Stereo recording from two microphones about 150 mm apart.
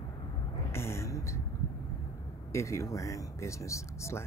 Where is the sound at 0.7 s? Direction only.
15° left (ahead or behind).